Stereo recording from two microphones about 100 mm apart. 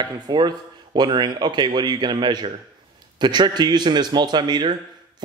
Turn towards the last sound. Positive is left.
turn(degrees=-45)  # may be behind; listen again after turning